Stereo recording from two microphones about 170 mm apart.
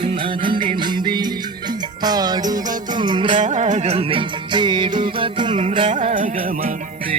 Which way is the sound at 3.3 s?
45° right (ahead or behind).